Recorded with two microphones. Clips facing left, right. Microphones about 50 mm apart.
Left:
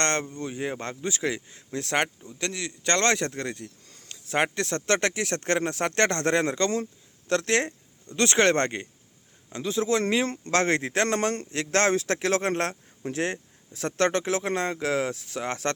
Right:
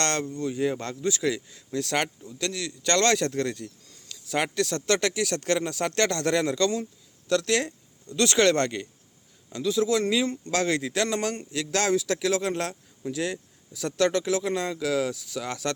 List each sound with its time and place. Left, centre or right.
0.0 s speech: left
3.8 s speech: left